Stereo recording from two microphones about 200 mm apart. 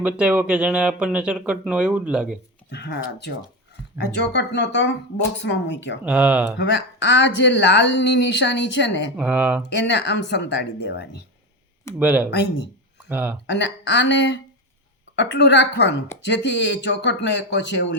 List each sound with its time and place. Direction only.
0.0 s speech: 5° right (ahead or behind)
2.6 s speech: 55° left (ahead or behind)
6.1 s speech: 5° right (ahead or behind)
6.6 s speech: 60° left (ahead or behind)
9.1 s speech: 5° right (ahead or behind)
9.8 s speech: 60° left (ahead or behind)
11.9 s speech: 5° right (ahead or behind)
13.5 s speech: 60° left (ahead or behind)